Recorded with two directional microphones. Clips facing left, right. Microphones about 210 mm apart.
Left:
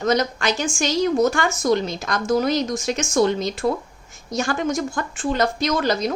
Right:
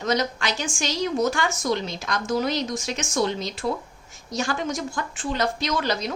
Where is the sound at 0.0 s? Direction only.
50° left (ahead or behind).